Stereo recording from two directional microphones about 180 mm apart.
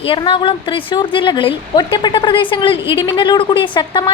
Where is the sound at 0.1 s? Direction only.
30° left (ahead or behind).